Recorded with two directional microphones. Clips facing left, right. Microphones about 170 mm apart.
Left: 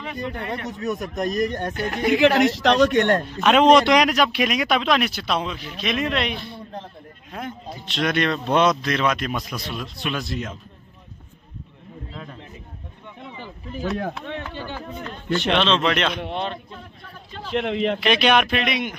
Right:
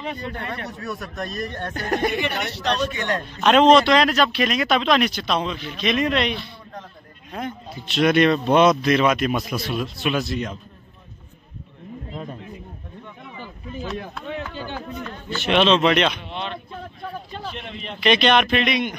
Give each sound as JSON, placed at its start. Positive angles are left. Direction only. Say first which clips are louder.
{"t": 0.2, "sound": "speech", "louder": "left 2 dB", "side_deg": 20}
{"t": 1.8, "sound": "speech", "louder": "right 7 dB", "side_deg": -40}
{"t": 2.0, "sound": "a woman's voice", "louder": "left 8 dB", "side_deg": 90}
{"t": 3.3, "sound": "speech", "louder": "right 4 dB", "side_deg": 5}
{"t": 6.3, "sound": "speech", "louder": "even", "side_deg": 50}
{"t": 7.3, "sound": "speech", "louder": "right 2 dB", "side_deg": 0}
{"t": 15.3, "sound": "speech", "louder": "right 2 dB", "side_deg": -5}
{"t": 16.2, "sound": "speech", "louder": "left 4 dB", "side_deg": 50}
{"t": 17.5, "sound": "a woman's voice", "louder": "left 16 dB", "side_deg": 90}
{"t": 18.0, "sound": "speech", "louder": "right 3 dB", "side_deg": 5}